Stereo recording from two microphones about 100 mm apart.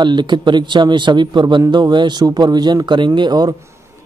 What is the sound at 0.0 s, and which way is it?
Speech, 50° right (ahead or behind).